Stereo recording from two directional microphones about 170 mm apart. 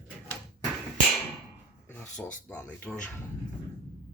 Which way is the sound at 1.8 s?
10° left (ahead or behind).